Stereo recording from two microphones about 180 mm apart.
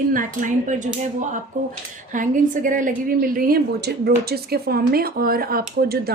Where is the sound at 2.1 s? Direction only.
45° right (ahead or behind).